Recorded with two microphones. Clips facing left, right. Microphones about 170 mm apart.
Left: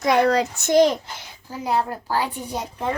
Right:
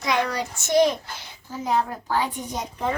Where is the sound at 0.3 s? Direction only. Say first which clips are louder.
Left 9 dB; 90° left.